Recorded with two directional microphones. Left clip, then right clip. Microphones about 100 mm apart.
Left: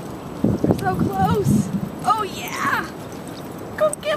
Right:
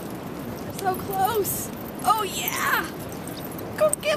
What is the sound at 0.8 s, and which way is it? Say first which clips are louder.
Speech: left 3 dB; 25° right (ahead or behind).